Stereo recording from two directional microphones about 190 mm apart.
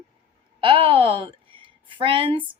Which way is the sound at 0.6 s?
30° right (ahead or behind).